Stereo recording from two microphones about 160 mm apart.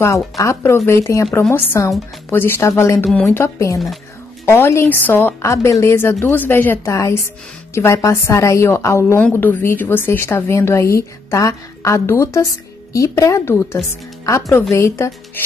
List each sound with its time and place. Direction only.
0.0 s a woman's voice: 20° left (ahead or behind)